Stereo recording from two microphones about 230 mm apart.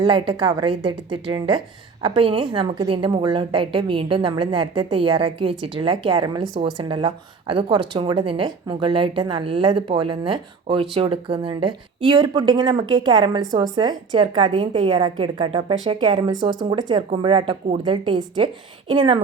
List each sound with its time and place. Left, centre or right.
0.0 s a woman's voice: right
14.5 s a woman's voice: right
14.8 s a woman's voice: centre